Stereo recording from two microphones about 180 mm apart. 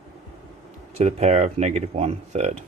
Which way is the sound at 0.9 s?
35° right (ahead or behind).